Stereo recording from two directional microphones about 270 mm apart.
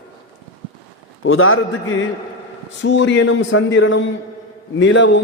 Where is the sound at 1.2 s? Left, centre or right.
Left.